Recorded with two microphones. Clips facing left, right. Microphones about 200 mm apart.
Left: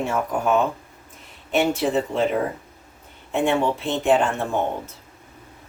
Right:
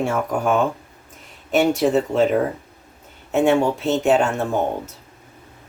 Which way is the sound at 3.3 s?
40° right (ahead or behind).